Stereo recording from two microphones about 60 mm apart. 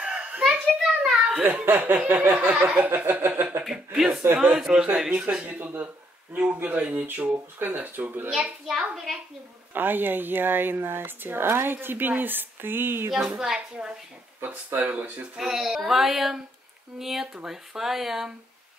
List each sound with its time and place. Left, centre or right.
0.0 s children playing: right
0.4 s a child's voice: centre
1.4 s speech: right
3.9 s a child's voice: centre
5.6 s speech: right
9.8 s speech: right
13.1 s a child's voice: centre
14.9 s speech: right
15.3 s speech: centre